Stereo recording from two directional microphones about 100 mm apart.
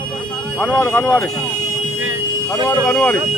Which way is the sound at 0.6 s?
10° left (ahead or behind).